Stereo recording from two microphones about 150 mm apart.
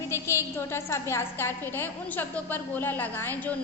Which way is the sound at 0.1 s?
20° left (ahead or behind).